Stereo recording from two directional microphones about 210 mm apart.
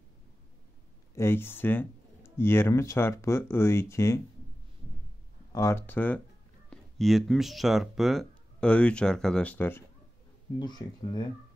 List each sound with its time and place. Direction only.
1.1 s speech: 10° left (ahead or behind)
5.5 s speech: 15° left (ahead or behind)